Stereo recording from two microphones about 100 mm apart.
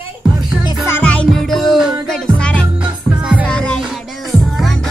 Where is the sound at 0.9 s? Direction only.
15° left (ahead or behind).